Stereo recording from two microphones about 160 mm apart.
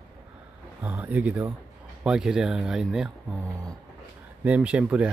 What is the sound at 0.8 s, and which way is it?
Speech, 10° right (ahead or behind).